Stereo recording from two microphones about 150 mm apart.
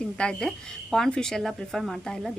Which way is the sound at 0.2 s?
5° left (ahead or behind).